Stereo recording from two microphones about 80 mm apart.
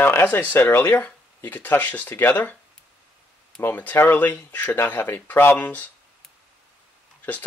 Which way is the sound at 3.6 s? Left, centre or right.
Left.